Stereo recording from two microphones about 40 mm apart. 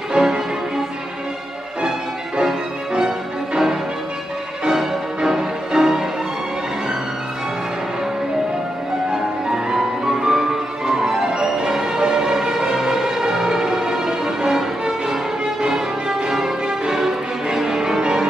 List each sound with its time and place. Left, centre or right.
0.1 s music: centre
4.6 s music: centre
9.1 s music: centre
16.3 s music: centre